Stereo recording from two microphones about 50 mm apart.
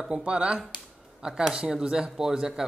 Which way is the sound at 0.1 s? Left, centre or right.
Right.